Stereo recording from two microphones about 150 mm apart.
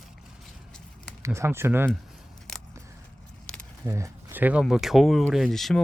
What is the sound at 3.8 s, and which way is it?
Speech, 20° right (ahead or behind).